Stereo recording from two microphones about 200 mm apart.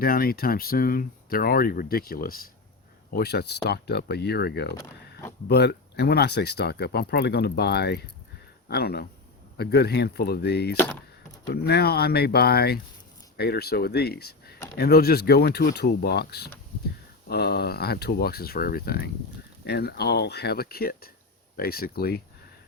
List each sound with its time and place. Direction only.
0.0 s speech: 45° left (ahead or behind)
10.8 s a sound: 10° left (ahead or behind)
11.5 s speech: 55° left (ahead or behind)